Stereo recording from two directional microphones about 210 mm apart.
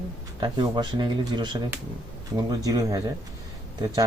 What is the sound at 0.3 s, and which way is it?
Speech, 20° right (ahead or behind).